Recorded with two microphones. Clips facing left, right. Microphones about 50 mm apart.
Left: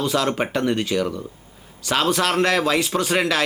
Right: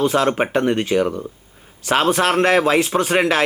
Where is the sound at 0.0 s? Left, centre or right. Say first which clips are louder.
Right 4 dB; right.